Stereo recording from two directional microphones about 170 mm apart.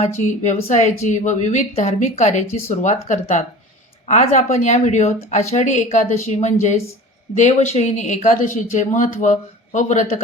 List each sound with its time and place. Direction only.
0.2 s speech: 45° left (ahead or behind)